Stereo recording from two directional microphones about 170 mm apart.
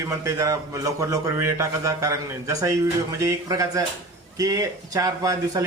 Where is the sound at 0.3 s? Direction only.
20° right (ahead or behind).